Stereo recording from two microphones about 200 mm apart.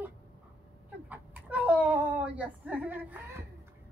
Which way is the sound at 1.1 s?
5° right (ahead or behind).